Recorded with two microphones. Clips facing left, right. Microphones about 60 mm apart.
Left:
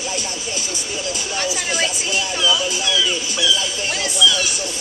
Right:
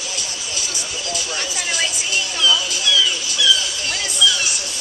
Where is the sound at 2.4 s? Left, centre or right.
Left.